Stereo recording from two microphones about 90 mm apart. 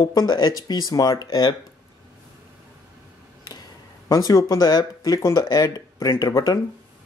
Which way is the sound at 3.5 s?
45° left (ahead or behind).